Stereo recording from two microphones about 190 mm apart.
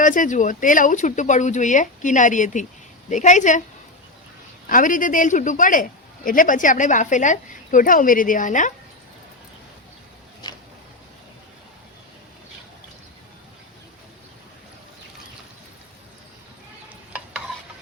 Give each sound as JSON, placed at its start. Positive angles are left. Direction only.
{"t": 0.0, "sound": "speech", "side_deg": 45}
{"t": 4.7, "sound": "a man's voice", "side_deg": 45}
{"t": 10.4, "sound": "a sound", "side_deg": 20}
{"t": 17.1, "sound": "stir", "side_deg": -5}